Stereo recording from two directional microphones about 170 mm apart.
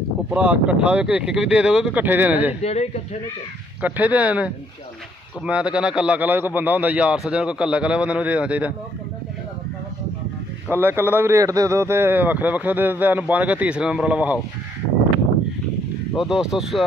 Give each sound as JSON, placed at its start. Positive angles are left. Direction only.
{"t": 0.3, "sound": "a man's voice", "side_deg": -5}
{"t": 2.6, "sound": "speech", "side_deg": 40}
{"t": 3.8, "sound": "a man's voice", "side_deg": -10}
{"t": 10.7, "sound": "a man's voice", "side_deg": -15}
{"t": 16.2, "sound": "speech", "side_deg": -5}